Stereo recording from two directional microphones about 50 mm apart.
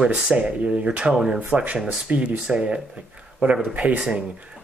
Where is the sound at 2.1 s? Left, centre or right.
Right.